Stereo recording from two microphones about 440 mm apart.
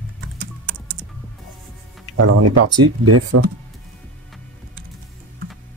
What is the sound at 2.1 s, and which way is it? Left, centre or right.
Speech, right.